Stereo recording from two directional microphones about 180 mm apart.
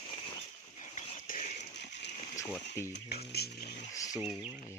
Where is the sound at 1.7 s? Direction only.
70° left (ahead or behind).